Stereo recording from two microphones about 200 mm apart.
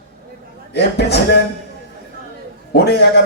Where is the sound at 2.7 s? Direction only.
55° left (ahead or behind).